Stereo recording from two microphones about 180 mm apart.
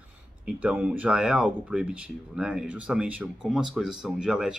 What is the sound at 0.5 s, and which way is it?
Speech, 5° right (ahead or behind).